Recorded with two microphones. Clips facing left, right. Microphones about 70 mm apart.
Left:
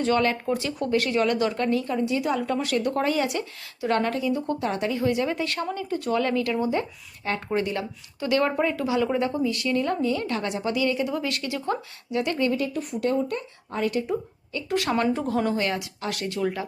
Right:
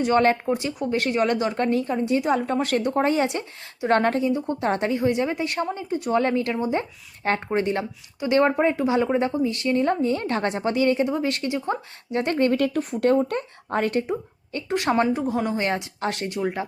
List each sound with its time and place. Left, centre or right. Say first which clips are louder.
0.1 s speech: right 4 dB; right
0.4 s speech: right 2 dB; right
2.8 s speech: right 3 dB; right
4.3 s speech: right 1 dB; right
4.6 s speech: right 5 dB; right
12.1 s a woman's voice: right 3 dB; right
14.7 s speech: right 3 dB; right
15.0 s speech: right 1 dB; centre
15.6 s speech: right 3 dB; right